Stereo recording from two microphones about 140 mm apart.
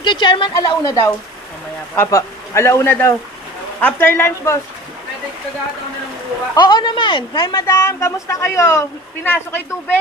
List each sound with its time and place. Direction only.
0.0 s a woman's voice: 35° left (ahead or behind); by 4.6 s 20° left (ahead or behind)
6.5 s speech: 30° left (ahead or behind)